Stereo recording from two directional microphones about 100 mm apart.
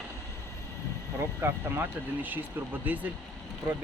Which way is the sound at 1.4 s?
20° right (ahead or behind).